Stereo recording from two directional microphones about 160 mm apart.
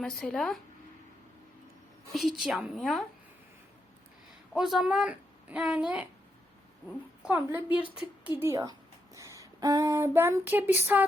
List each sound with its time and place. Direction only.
0.0 s a woman's voice: centre (ahead or behind)
2.1 s a woman's voice: centre (ahead or behind)
4.5 s speech: 5° right (ahead or behind)
7.2 s a woman's voice: 5° right (ahead or behind)
9.1 s a sound: 20° right (ahead or behind)
10.2 s speech: 15° right (ahead or behind)